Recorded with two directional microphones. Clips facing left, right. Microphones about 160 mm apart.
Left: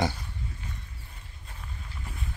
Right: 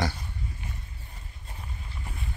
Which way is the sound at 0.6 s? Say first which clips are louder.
Right 1 dB; 20° right (ahead or behind).